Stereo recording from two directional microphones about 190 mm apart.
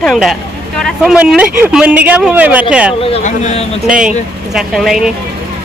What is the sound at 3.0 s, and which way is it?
Speech, 30° left (ahead or behind).